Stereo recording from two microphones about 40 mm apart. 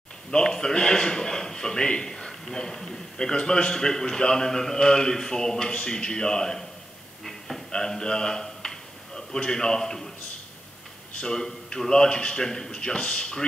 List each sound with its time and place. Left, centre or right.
0.3 s a man's voice: centre
7.2 s a sound: centre
7.7 s a man's voice: centre
11.1 s a man's voice: centre